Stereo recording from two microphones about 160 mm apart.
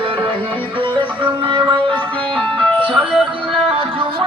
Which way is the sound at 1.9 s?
10° left (ahead or behind).